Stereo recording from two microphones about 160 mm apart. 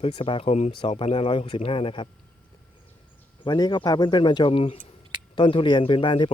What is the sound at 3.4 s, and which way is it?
A man's voice, 25° left (ahead or behind).